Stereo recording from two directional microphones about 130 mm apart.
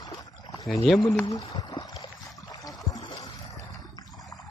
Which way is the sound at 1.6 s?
30° left (ahead or behind).